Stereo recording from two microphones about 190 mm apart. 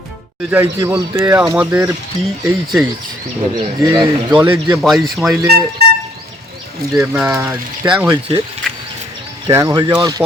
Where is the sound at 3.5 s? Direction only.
20° right (ahead or behind).